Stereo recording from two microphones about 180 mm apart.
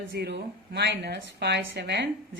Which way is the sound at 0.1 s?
65° right (ahead or behind).